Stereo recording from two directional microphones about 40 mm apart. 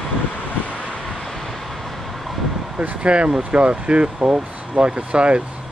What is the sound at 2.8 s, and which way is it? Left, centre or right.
Speech, right.